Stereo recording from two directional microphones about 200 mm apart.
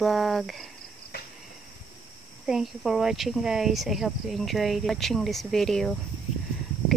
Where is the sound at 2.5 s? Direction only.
Centre (ahead or behind).